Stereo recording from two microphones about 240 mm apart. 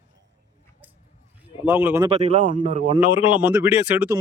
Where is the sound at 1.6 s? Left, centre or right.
Centre.